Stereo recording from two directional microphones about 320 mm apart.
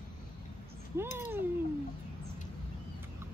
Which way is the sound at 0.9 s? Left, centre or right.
Centre.